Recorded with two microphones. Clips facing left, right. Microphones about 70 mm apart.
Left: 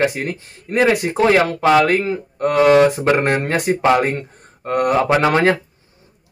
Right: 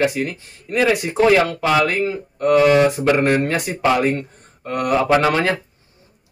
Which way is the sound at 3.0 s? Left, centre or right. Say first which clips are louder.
Even; left.